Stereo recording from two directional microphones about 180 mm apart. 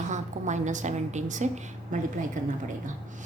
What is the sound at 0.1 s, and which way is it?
A woman's voice, 40° right (ahead or behind).